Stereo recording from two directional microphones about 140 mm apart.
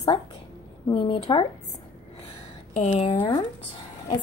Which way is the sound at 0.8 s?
35° left (ahead or behind).